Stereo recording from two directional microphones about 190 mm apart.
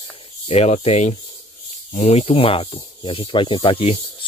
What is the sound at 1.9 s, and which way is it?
Speech, 35° left (ahead or behind).